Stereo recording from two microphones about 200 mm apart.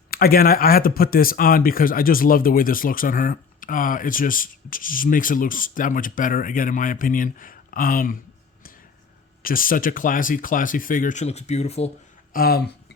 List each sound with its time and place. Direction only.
0.1 s speech: 50° left (ahead or behind)
9.4 s speech: 45° left (ahead or behind)
12.3 s speech: 50° left (ahead or behind)